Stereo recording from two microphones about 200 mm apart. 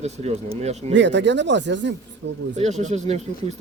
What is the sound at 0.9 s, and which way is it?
Speech, 60° right (ahead or behind).